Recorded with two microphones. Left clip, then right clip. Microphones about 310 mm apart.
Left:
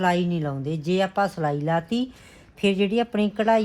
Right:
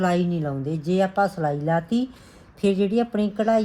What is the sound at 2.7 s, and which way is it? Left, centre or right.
Speech, centre.